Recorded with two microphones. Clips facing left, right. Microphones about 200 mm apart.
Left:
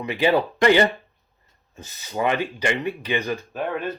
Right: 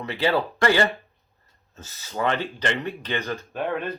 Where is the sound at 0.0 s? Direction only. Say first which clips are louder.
Left 3 dB; 15° left (ahead or behind).